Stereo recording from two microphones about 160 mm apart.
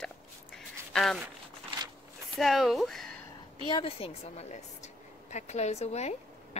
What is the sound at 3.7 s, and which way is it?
A woman's voice, 35° left (ahead or behind).